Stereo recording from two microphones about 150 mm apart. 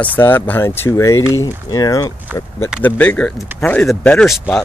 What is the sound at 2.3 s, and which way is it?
Speech, 10° right (ahead or behind).